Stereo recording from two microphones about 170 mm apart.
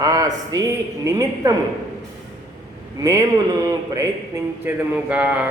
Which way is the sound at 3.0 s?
20° right (ahead or behind).